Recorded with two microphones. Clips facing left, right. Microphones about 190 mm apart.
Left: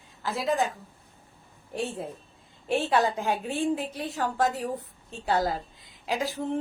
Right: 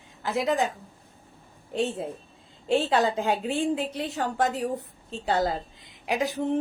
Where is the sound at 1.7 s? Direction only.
25° right (ahead or behind).